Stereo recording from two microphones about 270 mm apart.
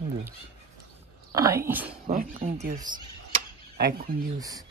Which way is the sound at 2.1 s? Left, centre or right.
Right.